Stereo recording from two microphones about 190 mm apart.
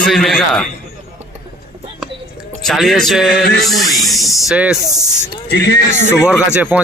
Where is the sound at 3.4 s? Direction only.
55° left (ahead or behind).